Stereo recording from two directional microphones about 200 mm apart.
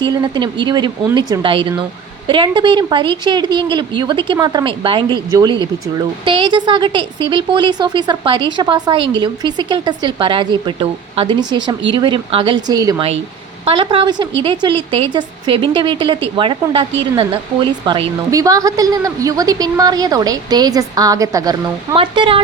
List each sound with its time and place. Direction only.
0.0 s a woman's voice: 20° right (ahead or behind)
17.8 s a woman's voice: 25° right (ahead or behind)